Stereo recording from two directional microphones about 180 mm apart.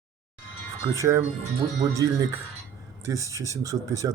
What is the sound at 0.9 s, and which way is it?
Speech, 15° right (ahead or behind).